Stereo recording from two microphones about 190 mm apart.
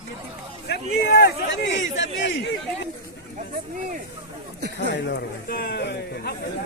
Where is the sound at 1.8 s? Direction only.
75° left (ahead or behind).